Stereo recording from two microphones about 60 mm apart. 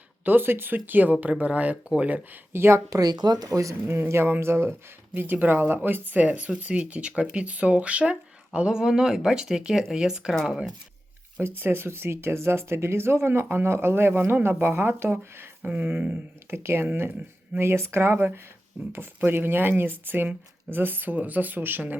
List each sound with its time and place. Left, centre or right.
0.3 s speech: right
2.5 s speech: right
2.9 s speech: right
3.4 s speech: right
4.1 s speech: right
5.1 s speech: right; by 10.7 s centre
11.3 s speech: right
15.6 s speech: right
16.5 s speech: right
17.6 s speech: right